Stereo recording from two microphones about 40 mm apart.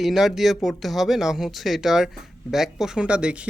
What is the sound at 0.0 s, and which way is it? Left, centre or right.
Speech, centre.